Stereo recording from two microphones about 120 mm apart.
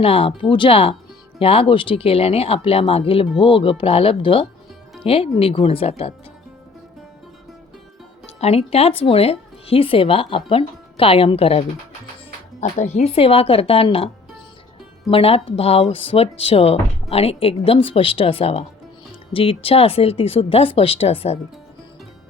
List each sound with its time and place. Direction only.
0.0 s speech: 50° left (ahead or behind)
8.4 s speech: 60° left (ahead or behind)
12.5 s speech: 85° left; by 14.1 s 50° left (ahead or behind)
15.1 s speech: 55° left (ahead or behind)